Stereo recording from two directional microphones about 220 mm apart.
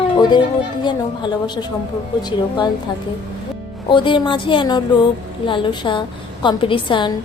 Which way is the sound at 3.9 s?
20° left (ahead or behind).